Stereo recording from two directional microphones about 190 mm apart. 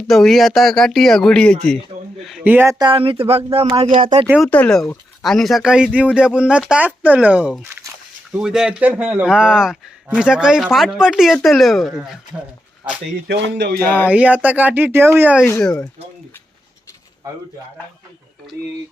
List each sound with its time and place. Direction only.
0.1 s speech: centre (ahead or behind); by 3.8 s 30° right (ahead or behind)
4.4 s speech: 10° left (ahead or behind); by 7.9 s 15° right (ahead or behind)
8.3 s speech: 5° right (ahead or behind)
13.2 s music: 65° right (ahead or behind)
13.7 s speech: 10° left (ahead or behind)
14.1 s speech: 5° right (ahead or behind)
15.6 s speech: 5° left (ahead or behind)